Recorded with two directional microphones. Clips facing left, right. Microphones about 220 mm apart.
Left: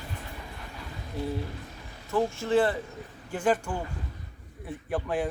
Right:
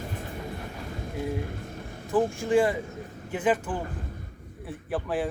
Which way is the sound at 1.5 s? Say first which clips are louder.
Right 5 dB; 50° right (ahead or behind).